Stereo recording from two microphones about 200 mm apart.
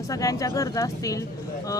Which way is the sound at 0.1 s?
15° left (ahead or behind).